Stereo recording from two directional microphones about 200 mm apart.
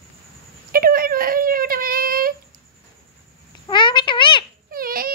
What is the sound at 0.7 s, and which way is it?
Whimper, 45° right (ahead or behind).